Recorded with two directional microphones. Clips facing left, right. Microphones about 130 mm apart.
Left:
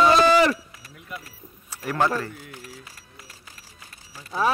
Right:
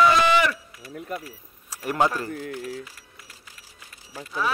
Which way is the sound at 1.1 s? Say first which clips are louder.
Right 5 dB; 45° right (ahead or behind).